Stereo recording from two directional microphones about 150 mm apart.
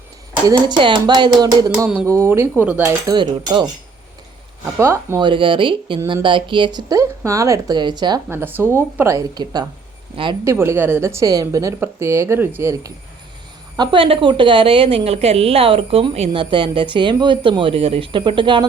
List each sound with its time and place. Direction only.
0.4 s a woman's voice: 35° right (ahead or behind); by 2.9 s 10° right (ahead or behind)
3.1 s a woman's voice: 30° right (ahead or behind)
4.8 s a woman's voice: 20° right (ahead or behind)
5.2 s a woman's voice: 35° right (ahead or behind)
8.3 s a woman's voice: 15° right (ahead or behind)
13.7 s a woman's voice: 30° right (ahead or behind)